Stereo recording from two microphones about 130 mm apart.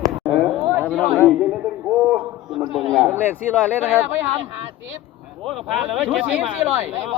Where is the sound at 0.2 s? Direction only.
15° right (ahead or behind).